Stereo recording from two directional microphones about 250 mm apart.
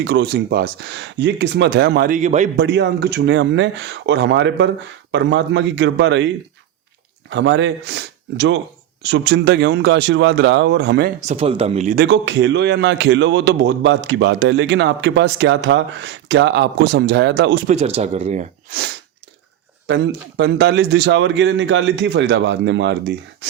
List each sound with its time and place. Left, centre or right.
0.0 s speech: right
2.6 s a man's voice: right
11.3 s speech: right
12.0 s a man's voice: right
17.7 s speech: right
19.9 s a man's voice: right